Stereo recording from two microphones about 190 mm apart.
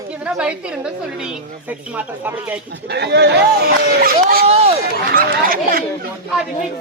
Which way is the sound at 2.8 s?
60° right (ahead or behind).